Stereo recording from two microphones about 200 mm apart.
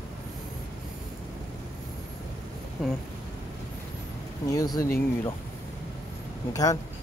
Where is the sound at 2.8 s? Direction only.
Centre (ahead or behind).